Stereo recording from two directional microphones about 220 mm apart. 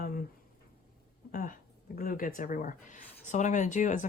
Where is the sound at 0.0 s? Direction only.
40° left (ahead or behind).